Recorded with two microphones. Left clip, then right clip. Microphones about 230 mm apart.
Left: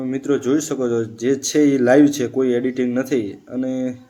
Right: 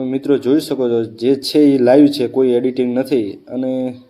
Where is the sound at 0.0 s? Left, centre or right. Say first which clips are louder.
Right 4 dB; centre.